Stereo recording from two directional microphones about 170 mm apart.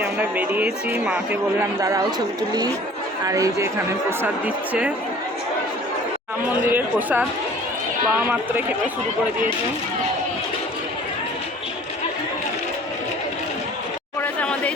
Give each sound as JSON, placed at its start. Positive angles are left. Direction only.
{"t": 0.0, "sound": "a man's voice", "side_deg": -10}
{"t": 1.8, "sound": "a man's voice", "side_deg": -20}
{"t": 6.7, "sound": "a man's voice", "side_deg": -10}
{"t": 14.2, "sound": "a sound", "side_deg": 10}